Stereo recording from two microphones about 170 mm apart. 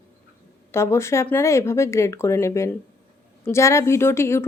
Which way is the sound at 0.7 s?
15° left (ahead or behind).